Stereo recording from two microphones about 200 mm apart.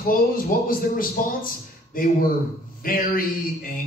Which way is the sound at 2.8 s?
45° left (ahead or behind).